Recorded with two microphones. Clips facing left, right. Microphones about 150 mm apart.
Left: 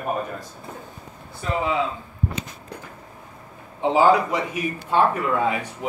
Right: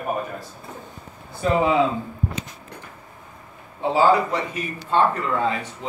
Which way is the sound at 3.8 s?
15° left (ahead or behind).